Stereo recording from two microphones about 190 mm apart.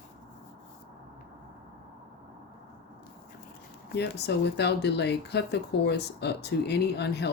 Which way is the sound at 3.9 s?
60° left (ahead or behind).